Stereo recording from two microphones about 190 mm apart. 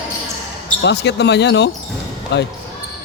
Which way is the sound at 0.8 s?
65° left (ahead or behind).